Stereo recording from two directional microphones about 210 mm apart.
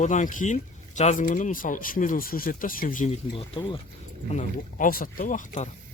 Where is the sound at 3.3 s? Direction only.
25° left (ahead or behind).